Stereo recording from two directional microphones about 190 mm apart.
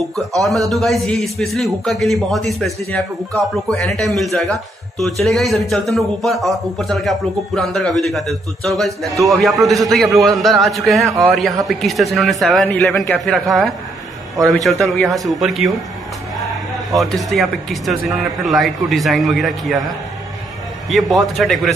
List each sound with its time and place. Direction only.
0.4 s a man's voice: centre (ahead or behind)
16.9 s a man's voice: centre (ahead or behind)
20.9 s a man's voice: centre (ahead or behind)